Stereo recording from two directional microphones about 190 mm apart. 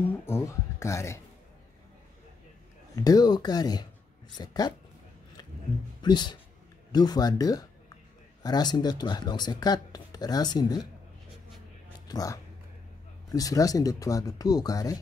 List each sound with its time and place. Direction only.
0.0 s speech: 10° left (ahead or behind)
3.0 s speech: 20° left (ahead or behind)
6.0 s speech: 25° left (ahead or behind)
12.1 s speech: 20° left (ahead or behind)